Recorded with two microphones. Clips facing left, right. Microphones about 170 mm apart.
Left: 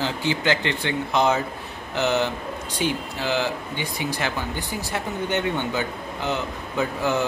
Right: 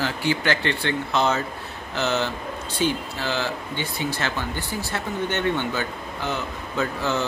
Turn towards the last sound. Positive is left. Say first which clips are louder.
# left 2 dB
turn(degrees=15)  # may be behind; listen again after turning